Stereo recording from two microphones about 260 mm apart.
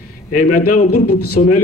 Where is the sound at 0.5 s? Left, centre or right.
Left.